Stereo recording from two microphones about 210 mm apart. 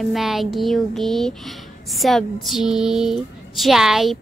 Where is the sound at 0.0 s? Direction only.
Centre (ahead or behind).